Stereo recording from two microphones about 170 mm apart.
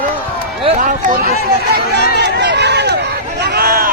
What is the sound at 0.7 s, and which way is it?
Speech, 50° right (ahead or behind).